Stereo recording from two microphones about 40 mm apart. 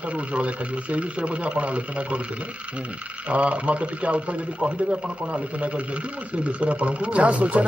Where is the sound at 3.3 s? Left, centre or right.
Right.